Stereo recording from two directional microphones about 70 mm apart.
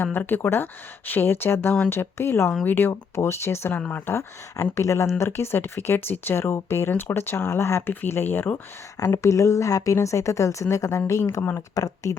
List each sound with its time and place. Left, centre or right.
0.0 s speech: left
3.8 s speech: centre
4.0 s speech: left
9.0 s speech: left
11.7 s speech: left